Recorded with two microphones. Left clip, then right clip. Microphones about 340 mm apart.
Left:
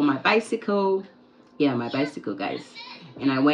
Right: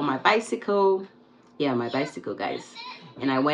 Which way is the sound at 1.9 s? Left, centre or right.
Centre.